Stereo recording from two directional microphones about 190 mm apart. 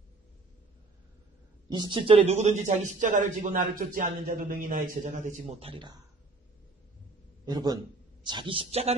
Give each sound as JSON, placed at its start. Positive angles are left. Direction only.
{"t": 1.7, "sound": "a man's voice", "side_deg": -25}
{"t": 7.4, "sound": "a woman's voice", "side_deg": -20}